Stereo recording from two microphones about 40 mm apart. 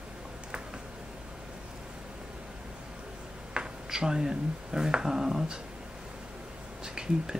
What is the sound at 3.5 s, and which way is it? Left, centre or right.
Speech, centre.